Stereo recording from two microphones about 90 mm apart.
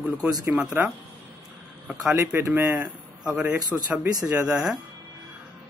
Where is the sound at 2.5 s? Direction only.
30° right (ahead or behind).